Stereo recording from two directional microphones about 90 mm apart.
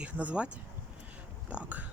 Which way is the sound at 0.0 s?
15° right (ahead or behind).